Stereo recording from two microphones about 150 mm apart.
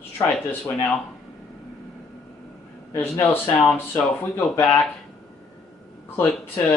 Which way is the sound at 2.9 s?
15° left (ahead or behind).